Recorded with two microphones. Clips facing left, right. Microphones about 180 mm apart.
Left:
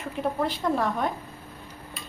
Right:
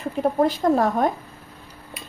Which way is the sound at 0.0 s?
40° right (ahead or behind).